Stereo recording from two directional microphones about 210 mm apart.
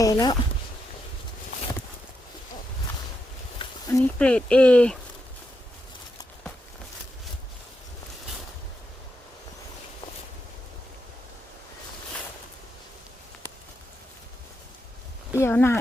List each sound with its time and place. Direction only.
0.0 s speech: 20° left (ahead or behind)
3.6 s a sound: 25° left (ahead or behind)
3.9 s speech: 5° left (ahead or behind)
15.3 s speech: 10° left (ahead or behind)